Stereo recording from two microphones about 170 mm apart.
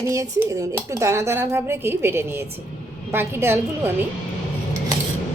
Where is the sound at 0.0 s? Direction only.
15° right (ahead or behind).